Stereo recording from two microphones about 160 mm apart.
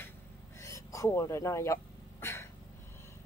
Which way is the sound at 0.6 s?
20° left (ahead or behind).